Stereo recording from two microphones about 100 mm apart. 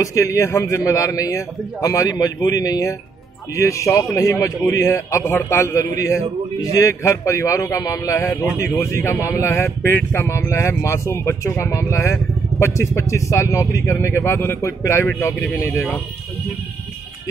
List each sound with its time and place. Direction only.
0.0 s a man's voice: 35° left (ahead or behind)